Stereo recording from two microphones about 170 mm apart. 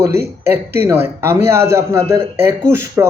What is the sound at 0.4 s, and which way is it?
Speech, 15° right (ahead or behind).